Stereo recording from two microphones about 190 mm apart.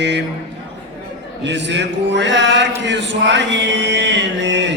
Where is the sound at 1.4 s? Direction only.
70° right (ahead or behind).